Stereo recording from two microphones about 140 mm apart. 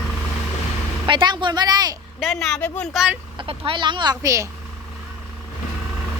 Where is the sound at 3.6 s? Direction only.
35° right (ahead or behind).